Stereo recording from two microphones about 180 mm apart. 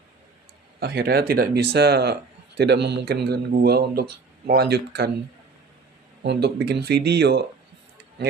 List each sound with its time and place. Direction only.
0.8 s speech: 60° right (ahead or behind)
6.2 s speech: 65° right (ahead or behind)